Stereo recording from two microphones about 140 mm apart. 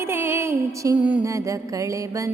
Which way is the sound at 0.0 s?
15° right (ahead or behind).